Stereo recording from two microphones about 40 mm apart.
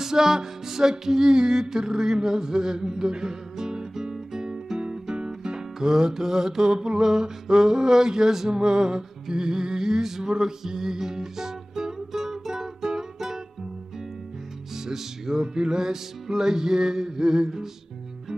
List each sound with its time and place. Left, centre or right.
0.0 s music: centre
14.9 s music: centre